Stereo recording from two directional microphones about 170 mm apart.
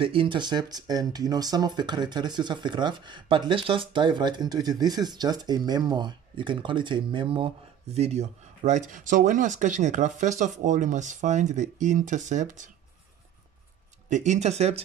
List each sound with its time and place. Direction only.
0.0 s speech: 30° right (ahead or behind)
14.0 s speech: 45° right (ahead or behind)